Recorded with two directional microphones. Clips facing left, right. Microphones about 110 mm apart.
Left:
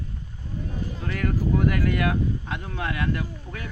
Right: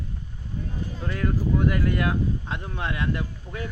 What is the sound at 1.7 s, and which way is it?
Speech, 25° right (ahead or behind).